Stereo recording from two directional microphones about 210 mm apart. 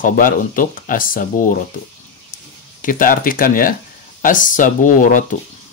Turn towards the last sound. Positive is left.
turn(degrees=40)  # may be behind; listen again after turning